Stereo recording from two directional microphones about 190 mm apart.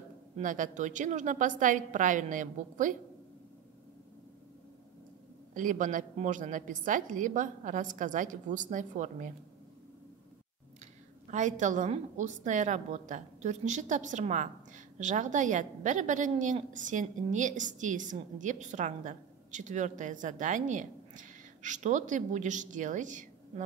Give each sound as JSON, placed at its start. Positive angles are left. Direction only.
{"t": 0.4, "sound": "a woman's voice", "side_deg": -45}
{"t": 5.5, "sound": "a woman's voice", "side_deg": -45}
{"t": 11.2, "sound": "a woman's voice", "side_deg": -40}